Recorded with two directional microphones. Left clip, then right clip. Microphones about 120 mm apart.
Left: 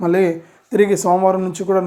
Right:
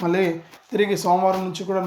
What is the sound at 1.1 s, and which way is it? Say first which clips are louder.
Speech: left 4 dB; 25° left (ahead or behind).